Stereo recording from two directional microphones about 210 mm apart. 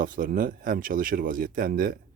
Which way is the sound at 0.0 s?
40° right (ahead or behind).